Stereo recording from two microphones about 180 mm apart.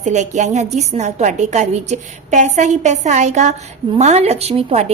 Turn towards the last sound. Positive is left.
turn(degrees=-35)  # may be behind; listen again after turning